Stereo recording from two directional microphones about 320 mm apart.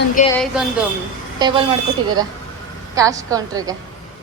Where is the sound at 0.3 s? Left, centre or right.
Centre.